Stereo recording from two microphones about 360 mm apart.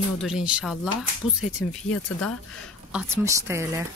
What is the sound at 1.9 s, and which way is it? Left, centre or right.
Speech, left.